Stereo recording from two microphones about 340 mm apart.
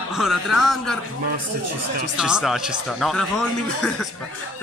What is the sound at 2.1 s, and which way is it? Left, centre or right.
Speech, centre.